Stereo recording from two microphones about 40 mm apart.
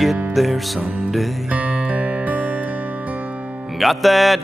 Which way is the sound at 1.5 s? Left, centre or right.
Right.